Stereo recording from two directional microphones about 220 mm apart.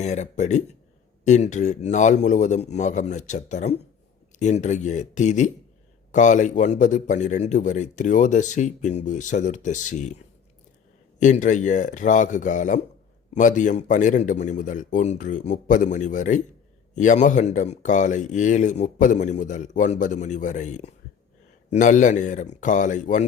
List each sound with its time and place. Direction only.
0.0 s a man's voice: 30° left (ahead or behind)
11.2 s a man's voice: 35° left (ahead or behind)